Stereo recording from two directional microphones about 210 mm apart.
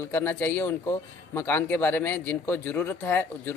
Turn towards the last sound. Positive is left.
turn(degrees=10)  # may be behind; listen again after turning